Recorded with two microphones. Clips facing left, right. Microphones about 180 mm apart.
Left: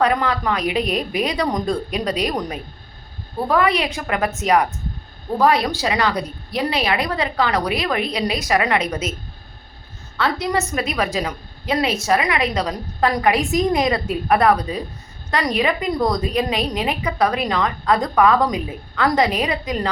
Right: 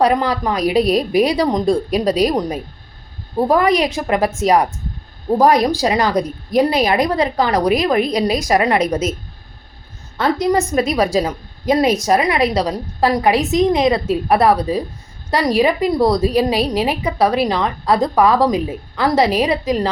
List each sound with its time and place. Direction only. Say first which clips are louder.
0.0 s a woman's voice: right 3 dB; 35° right (ahead or behind)
3.5 s a woman's voice: right 3 dB; 40° right (ahead or behind)
10.2 s a woman's voice: right 5 dB; 40° right (ahead or behind)
13.8 s a woman's voice: right 5 dB; centre (ahead or behind)
15.5 s a woman's voice: right 6 dB; 30° right (ahead or behind)